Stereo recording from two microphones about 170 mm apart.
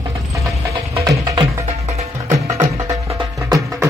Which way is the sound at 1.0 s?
25° right (ahead or behind).